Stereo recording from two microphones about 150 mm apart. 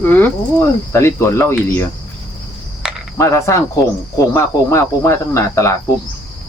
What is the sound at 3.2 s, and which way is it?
Speech, 20° left (ahead or behind).